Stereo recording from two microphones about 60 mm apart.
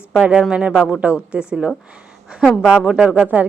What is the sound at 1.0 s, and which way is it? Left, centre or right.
Speech, right.